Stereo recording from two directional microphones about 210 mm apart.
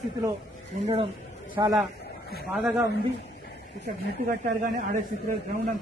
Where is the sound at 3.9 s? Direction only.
40° right (ahead or behind).